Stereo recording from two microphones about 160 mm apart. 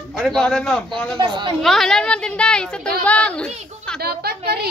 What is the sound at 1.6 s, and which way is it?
A woman's voice, centre (ahead or behind).